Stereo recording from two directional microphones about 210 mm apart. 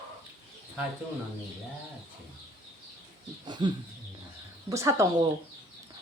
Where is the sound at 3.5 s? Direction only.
20° right (ahead or behind).